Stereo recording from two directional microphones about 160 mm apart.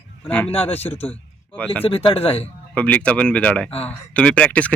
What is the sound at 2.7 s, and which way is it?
Speech, 10° left (ahead or behind).